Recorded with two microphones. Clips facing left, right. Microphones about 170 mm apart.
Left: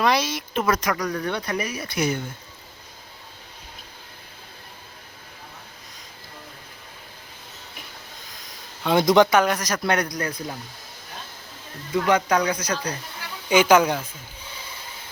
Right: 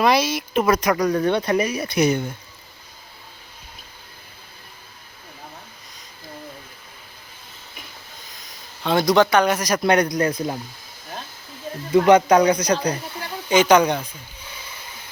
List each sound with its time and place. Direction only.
0.0 s speech: 10° right (ahead or behind)
8.8 s speech: 15° left (ahead or behind)
9.6 s speech: 10° right (ahead or behind)
12.0 s speech: 20° right (ahead or behind)
13.5 s a woman's voice: 5° left (ahead or behind)